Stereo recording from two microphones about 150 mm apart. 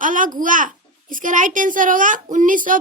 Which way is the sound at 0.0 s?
60° right (ahead or behind).